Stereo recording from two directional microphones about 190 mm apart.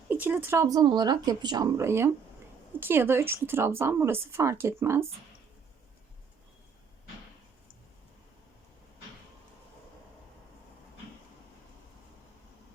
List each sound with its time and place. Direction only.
0.1 s speech: 10° right (ahead or behind)